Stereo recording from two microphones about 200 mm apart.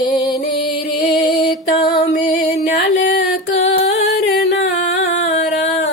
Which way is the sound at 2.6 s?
60° left (ahead or behind).